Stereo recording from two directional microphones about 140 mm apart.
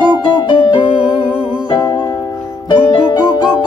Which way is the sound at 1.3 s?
10° right (ahead or behind).